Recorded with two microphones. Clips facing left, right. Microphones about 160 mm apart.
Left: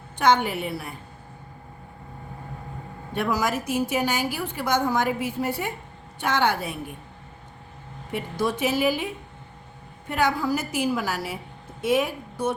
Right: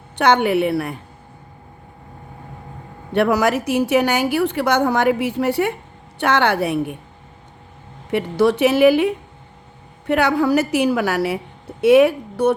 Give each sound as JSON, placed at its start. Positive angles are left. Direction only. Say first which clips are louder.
{"t": 0.2, "sound": "a woman's voice", "louder": "right 6 dB", "side_deg": -70}
{"t": 3.1, "sound": "a woman's voice", "louder": "right 8 dB", "side_deg": -70}
{"t": 8.1, "sound": "a woman's voice", "louder": "right 10 dB", "side_deg": -70}